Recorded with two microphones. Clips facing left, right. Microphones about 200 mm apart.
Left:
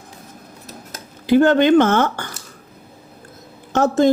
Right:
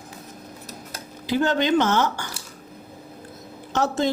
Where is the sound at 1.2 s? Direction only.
55° left (ahead or behind).